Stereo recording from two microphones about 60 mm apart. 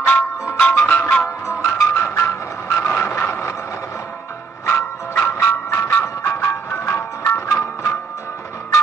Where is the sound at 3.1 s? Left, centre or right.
Left.